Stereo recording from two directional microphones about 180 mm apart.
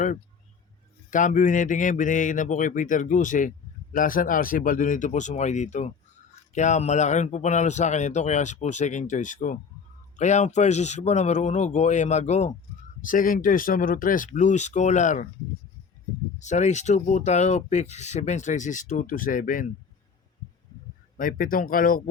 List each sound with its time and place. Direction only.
1.1 s speech: 45° left (ahead or behind)
16.4 s speech: 40° left (ahead or behind)
21.2 s speech: 50° left (ahead or behind)